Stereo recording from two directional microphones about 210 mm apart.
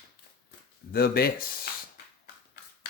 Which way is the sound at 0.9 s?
45° left (ahead or behind).